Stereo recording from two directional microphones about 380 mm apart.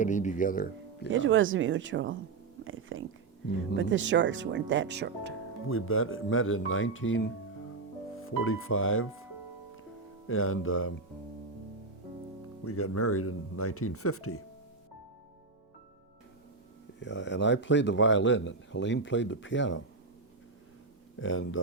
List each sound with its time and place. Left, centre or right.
0.0 s speech: centre
1.1 s speech: right
2.6 s a sound: right
3.8 s speech: right
5.6 s speech: left
10.2 s speech: left
12.6 s speech: left
17.0 s a man's voice: left
21.2 s speech: left